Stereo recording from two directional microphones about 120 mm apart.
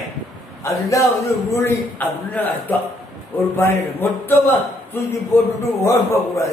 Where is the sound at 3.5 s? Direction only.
20° left (ahead or behind).